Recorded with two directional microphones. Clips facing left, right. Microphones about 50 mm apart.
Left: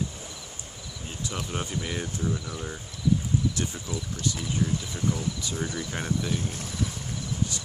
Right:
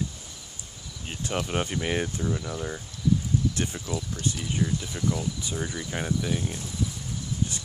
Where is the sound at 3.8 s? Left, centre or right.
Right.